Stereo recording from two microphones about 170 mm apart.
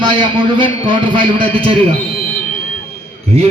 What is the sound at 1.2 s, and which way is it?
Speech, 30° right (ahead or behind).